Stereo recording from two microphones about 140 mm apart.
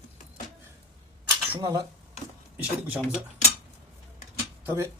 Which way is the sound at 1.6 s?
25° right (ahead or behind).